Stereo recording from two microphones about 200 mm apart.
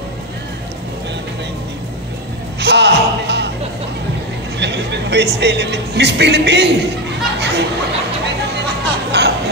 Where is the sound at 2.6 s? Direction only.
55° right (ahead or behind).